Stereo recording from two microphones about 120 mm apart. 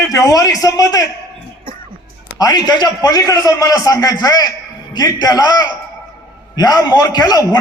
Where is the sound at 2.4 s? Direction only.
35° left (ahead or behind).